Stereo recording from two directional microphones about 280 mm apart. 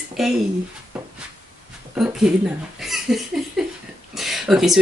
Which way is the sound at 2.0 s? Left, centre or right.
Centre.